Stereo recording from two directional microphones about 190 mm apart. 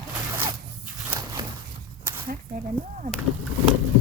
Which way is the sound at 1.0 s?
20° right (ahead or behind).